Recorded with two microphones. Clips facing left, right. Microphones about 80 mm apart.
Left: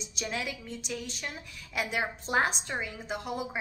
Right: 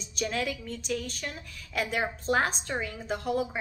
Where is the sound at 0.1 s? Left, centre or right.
Centre.